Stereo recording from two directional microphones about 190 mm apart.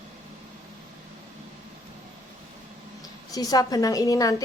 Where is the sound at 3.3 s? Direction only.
20° left (ahead or behind).